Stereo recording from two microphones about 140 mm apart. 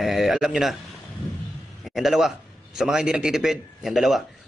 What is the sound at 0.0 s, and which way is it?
Speech, centre (ahead or behind).